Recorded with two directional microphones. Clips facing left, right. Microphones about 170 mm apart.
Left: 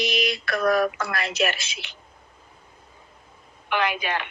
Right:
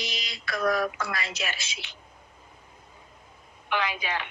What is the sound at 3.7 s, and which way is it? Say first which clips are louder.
Speech: left 4 dB; 65° left (ahead or behind).